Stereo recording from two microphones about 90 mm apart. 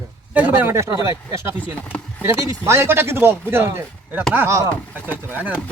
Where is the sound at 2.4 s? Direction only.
35° right (ahead or behind).